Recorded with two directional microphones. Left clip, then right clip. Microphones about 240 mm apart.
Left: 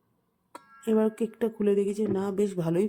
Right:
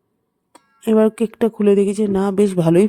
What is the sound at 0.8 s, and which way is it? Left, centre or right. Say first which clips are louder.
Speech: right 10 dB; right.